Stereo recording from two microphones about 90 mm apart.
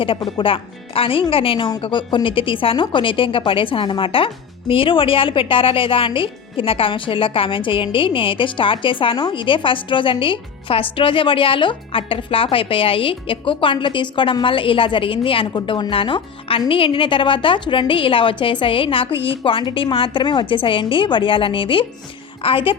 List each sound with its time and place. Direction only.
0.2 s speech: 75° left (ahead or behind)
15.5 s speech: 60° left (ahead or behind)
22.4 s speech: 85° left